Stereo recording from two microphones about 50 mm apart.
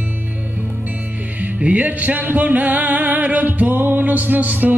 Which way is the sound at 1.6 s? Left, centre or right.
Right.